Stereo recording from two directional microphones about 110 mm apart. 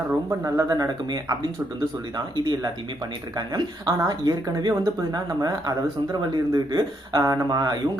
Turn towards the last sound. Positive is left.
turn(degrees=-35)  # may be behind; listen again after turning